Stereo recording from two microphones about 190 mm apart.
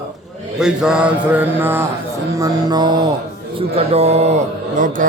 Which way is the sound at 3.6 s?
30° right (ahead or behind).